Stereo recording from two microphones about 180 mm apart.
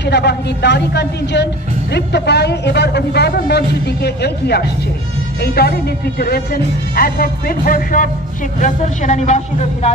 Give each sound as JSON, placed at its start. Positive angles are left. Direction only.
{"t": 0.0, "sound": "speech", "side_deg": 65}